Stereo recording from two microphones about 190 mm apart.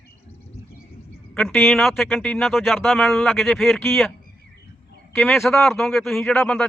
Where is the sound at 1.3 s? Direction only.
5° left (ahead or behind).